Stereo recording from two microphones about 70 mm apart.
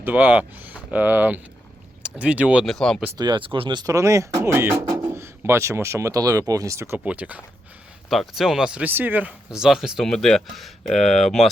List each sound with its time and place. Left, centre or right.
0.0 s speech: right
2.6 s speech: centre
3.2 s speech: right
3.8 s speech: right
4.4 s speech: right
7.0 s speech: right
8.1 s speech: centre
8.7 s speech: right
9.5 s speech: centre
10.0 s speech: centre